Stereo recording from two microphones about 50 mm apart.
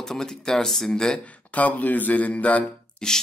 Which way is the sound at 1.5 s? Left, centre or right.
Left.